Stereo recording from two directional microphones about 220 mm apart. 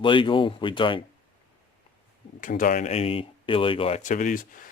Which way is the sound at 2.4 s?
35° left (ahead or behind).